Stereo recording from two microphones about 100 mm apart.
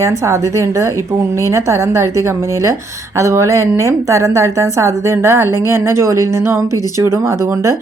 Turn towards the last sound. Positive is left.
turn(degrees=-30)  # may be behind; listen again after turning